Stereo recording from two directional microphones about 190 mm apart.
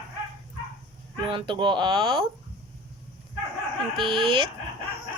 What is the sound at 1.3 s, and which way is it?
Speech, 25° right (ahead or behind).